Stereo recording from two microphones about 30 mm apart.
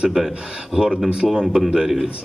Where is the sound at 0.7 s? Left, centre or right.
Right.